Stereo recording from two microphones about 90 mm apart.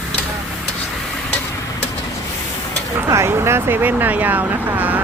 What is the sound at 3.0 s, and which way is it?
Vehicle, 30° right (ahead or behind).